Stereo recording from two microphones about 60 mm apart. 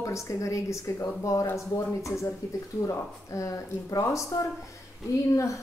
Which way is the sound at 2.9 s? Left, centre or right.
Left.